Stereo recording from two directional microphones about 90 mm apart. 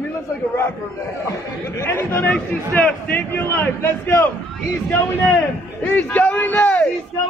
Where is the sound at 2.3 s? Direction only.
15° left (ahead or behind).